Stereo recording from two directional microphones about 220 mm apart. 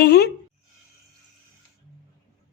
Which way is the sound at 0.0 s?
45° left (ahead or behind).